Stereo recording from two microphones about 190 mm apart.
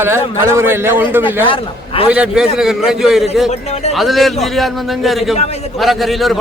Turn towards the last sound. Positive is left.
turn(degrees=0)  # may be behind; listen again after turning